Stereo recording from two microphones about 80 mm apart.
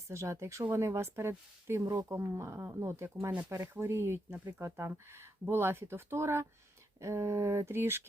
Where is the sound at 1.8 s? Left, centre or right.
Right.